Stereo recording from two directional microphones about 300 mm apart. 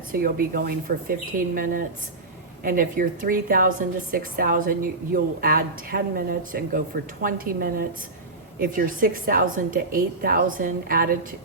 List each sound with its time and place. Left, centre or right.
0.1 s a woman's voice: right